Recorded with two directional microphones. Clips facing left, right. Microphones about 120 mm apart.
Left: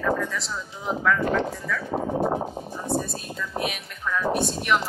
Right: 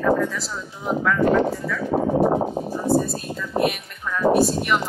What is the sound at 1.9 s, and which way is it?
Speech, 65° right (ahead or behind).